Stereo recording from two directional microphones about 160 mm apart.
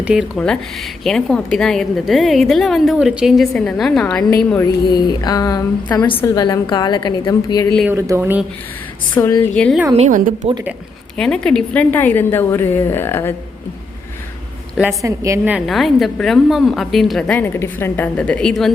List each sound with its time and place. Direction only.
0.0 s a woman's voice: 5° right (ahead or behind)
4.6 s a woman's voice: 25° left (ahead or behind)
7.9 s speech: 15° right (ahead or behind)
9.2 s a woman's voice: 15° left (ahead or behind)
9.9 s a woman's voice: 50° right (ahead or behind)
11.2 s a woman's voice: 5° left (ahead or behind)
15.0 s a woman's voice: 20° right (ahead or behind)
15.5 s a woman's voice: centre (ahead or behind)